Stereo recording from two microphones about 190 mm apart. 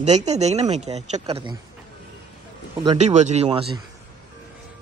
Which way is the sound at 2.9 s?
35° right (ahead or behind).